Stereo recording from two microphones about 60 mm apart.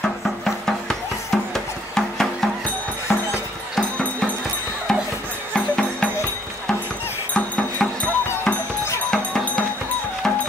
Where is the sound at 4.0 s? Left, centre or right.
Left.